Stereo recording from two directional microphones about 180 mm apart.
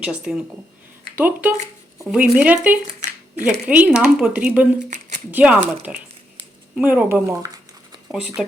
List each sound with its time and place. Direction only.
0.0 s speech: 5° right (ahead or behind)
3.3 s speech: 40° right (ahead or behind)
3.7 s speech: 10° right (ahead or behind)